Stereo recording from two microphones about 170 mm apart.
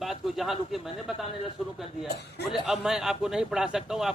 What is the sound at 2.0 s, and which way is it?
Speech, 75° left (ahead or behind).